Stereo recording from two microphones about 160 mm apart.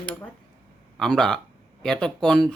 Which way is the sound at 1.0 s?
5° left (ahead or behind).